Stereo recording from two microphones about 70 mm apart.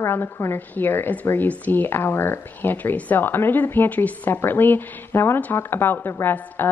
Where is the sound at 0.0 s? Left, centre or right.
Left.